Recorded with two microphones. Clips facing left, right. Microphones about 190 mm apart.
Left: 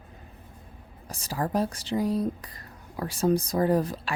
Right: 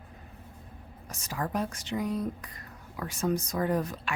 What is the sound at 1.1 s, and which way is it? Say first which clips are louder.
Speech: left 4 dB; 35° left (ahead or behind).